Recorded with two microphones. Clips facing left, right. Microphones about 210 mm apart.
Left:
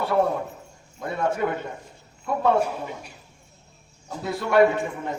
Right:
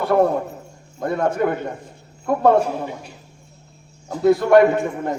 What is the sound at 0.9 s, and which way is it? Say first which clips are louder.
Speech: right 5 dB; 50° right (ahead or behind).